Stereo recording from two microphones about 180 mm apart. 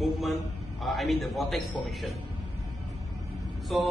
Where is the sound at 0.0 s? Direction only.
Centre (ahead or behind).